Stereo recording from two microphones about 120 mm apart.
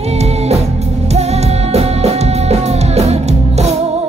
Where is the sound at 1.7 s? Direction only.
60° right (ahead or behind).